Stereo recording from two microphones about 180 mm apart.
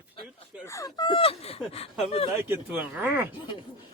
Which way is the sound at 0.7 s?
20° left (ahead or behind).